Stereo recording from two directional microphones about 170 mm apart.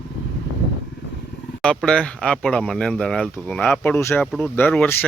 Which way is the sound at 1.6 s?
5° left (ahead or behind).